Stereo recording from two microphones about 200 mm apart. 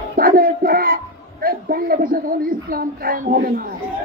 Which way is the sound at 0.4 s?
45° right (ahead or behind).